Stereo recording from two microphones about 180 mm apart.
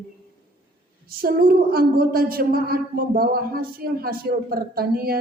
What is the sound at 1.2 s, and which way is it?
A woman's voice, 55° right (ahead or behind).